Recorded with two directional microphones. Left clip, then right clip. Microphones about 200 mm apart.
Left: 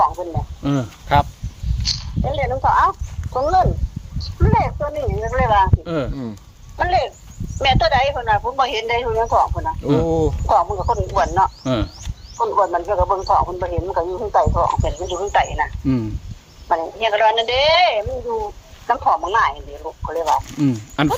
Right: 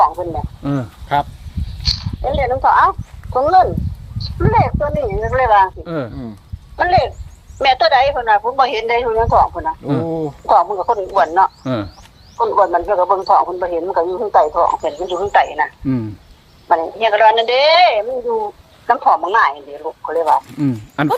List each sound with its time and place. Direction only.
0.0 s speech: 20° right (ahead or behind)
0.6 s speech: centre (ahead or behind)
1.0 s speech: 35° left (ahead or behind)
1.8 s speech: 20° right (ahead or behind)
5.8 s speech: centre (ahead or behind)
6.7 s speech: 20° right (ahead or behind)
11.6 s speech: 5° right (ahead or behind)
12.4 s speech: 20° right (ahead or behind)
20.6 s speech: 5° right (ahead or behind)